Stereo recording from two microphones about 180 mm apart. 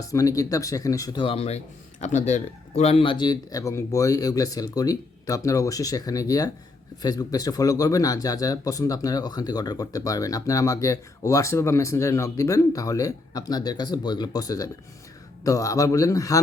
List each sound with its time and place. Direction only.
0.0 s speech: 20° left (ahead or behind)